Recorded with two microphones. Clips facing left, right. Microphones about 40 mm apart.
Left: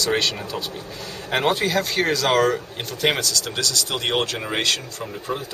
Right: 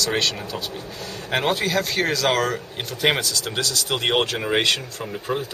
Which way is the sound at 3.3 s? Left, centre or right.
Centre.